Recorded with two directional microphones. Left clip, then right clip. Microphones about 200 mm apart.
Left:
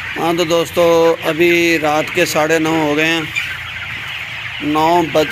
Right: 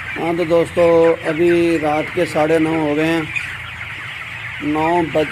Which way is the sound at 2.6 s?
15° left (ahead or behind).